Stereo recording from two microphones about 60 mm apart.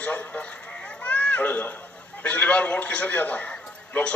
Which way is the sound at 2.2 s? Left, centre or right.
Left.